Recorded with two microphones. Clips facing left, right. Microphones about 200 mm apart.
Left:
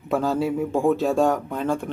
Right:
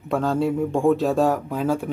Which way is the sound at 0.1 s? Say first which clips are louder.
Right 1 dB; centre (ahead or behind).